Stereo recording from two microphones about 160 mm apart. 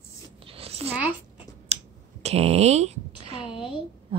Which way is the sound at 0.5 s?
40° right (ahead or behind).